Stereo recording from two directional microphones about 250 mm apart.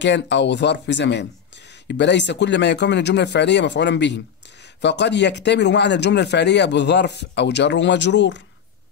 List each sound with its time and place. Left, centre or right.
0.0 s speech: left